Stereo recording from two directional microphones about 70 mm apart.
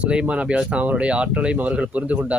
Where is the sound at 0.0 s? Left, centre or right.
Centre.